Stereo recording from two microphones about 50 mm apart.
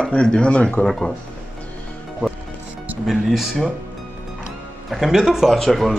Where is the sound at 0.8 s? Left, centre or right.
Centre.